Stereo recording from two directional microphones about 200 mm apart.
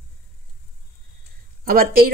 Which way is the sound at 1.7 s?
45° right (ahead or behind).